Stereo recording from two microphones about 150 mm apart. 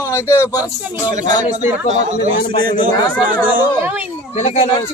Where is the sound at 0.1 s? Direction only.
20° left (ahead or behind).